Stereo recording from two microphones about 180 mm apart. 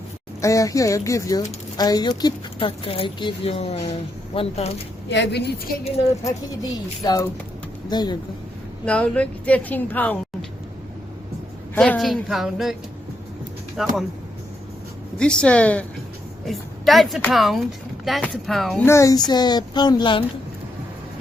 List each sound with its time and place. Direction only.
0.4 s speech: 20° left (ahead or behind); by 4.7 s 35° left (ahead or behind)
5.0 s a woman's voice: 75° left (ahead or behind)
6.2 s speech: 20° left (ahead or behind)
8.8 s a woman's voice: 5° left (ahead or behind)
11.7 s speech: 5° left (ahead or behind)
13.8 s speech: centre (ahead or behind)
15.2 s a woman's voice: 5° left (ahead or behind)
18.9 s speech: 15° left (ahead or behind)